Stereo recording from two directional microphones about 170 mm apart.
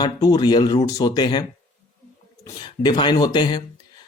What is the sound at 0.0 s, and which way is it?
Speech, 25° left (ahead or behind).